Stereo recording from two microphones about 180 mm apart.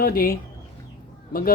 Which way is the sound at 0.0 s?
55° left (ahead or behind).